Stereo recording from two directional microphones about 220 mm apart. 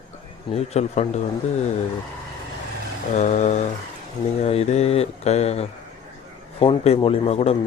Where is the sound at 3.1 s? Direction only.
35° left (ahead or behind).